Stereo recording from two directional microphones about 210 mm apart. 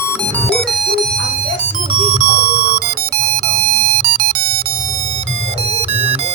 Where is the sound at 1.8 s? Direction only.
25° right (ahead or behind).